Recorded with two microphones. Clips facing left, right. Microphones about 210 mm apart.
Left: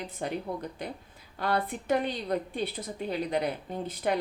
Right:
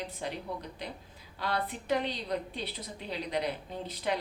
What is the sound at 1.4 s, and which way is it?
A woman's voice, 50° left (ahead or behind).